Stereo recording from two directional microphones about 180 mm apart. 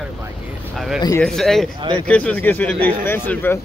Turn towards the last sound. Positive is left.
turn(degrees=10)  # may be behind; listen again after turning